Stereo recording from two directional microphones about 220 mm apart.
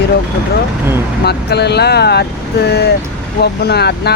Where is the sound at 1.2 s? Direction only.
50° left (ahead or behind).